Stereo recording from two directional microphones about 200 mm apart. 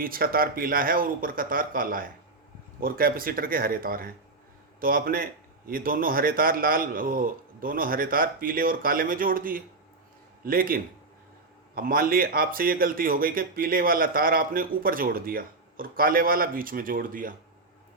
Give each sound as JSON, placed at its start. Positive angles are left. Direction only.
{"t": 0.0, "sound": "a man's voice", "side_deg": -45}